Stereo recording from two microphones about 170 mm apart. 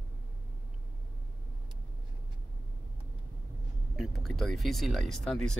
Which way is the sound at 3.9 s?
Centre (ahead or behind).